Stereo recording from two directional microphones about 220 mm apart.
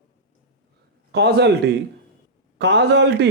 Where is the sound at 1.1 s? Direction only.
50° right (ahead or behind).